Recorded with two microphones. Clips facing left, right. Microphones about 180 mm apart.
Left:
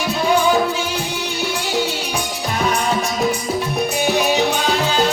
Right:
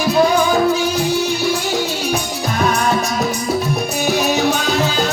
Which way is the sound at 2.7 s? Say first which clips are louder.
Right 2 dB; 40° right (ahead or behind).